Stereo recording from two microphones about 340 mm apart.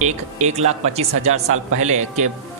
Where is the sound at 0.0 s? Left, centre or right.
Centre.